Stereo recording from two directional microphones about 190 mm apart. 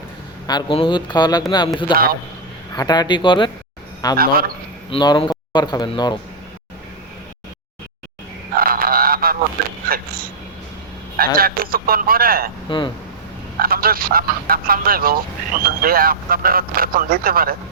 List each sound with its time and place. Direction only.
0.4 s speech: 25° left (ahead or behind)
4.2 s speech: 50° right (ahead or behind)
4.9 s speech: 25° left (ahead or behind)
8.5 s honk: 50° right (ahead or behind)
11.2 s speech: 50° right (ahead or behind)
12.6 s speech: 25° left (ahead or behind)
13.6 s speech: 50° right (ahead or behind)